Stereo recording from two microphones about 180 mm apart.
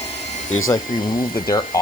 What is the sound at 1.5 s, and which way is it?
Speech, 20° left (ahead or behind).